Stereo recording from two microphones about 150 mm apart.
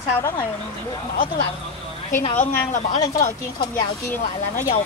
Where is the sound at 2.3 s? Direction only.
55° left (ahead or behind).